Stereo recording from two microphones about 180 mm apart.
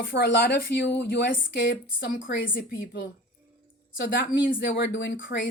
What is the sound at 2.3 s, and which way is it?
Speech, 50° left (ahead or behind).